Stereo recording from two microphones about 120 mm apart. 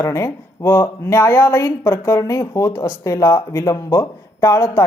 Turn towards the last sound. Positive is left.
turn(degrees=25)  # may be behind; listen again after turning